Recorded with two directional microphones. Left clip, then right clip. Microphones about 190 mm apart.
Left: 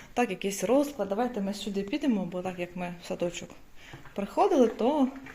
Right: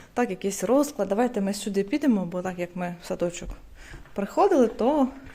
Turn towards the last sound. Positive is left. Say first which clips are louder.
# right 3 dB
turn(degrees=-25)  # may be behind; listen again after turning